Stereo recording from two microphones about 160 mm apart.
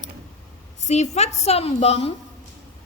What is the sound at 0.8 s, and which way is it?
A woman's voice, 45° left (ahead or behind).